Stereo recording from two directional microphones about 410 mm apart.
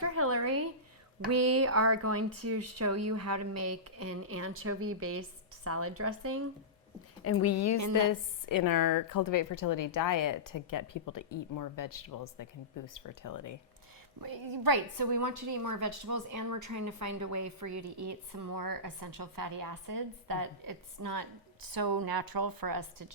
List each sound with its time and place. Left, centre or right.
0.0 s a sound: right
1.3 s speech: right
7.3 s a woman's voice: left
8.0 s a woman's voice: left
14.2 s a woman's voice: right